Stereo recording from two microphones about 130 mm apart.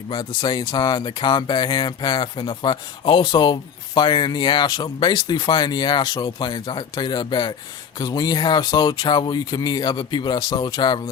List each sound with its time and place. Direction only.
0.1 s speech: 35° left (ahead or behind)